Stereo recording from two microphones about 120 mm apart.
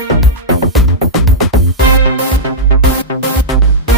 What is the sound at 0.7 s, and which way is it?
Music, centre (ahead or behind).